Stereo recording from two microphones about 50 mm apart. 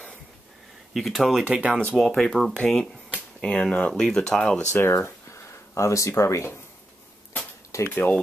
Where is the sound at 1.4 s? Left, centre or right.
Right.